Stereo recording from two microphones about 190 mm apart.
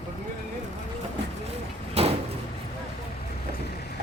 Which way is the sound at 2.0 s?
35° right (ahead or behind).